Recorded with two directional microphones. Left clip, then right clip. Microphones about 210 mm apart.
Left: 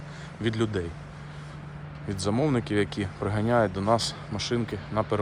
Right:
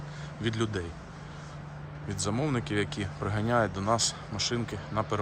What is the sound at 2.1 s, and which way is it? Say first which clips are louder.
Speech: left 5 dB; 15° right (ahead or behind).